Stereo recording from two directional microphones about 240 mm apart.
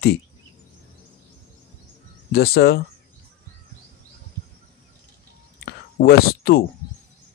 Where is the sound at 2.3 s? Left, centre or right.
Left.